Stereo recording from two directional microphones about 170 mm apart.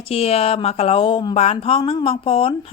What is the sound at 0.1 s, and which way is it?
Speech, 35° left (ahead or behind).